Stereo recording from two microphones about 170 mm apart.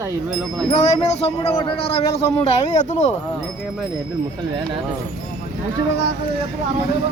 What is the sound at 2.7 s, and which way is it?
Speech, 45° left (ahead or behind).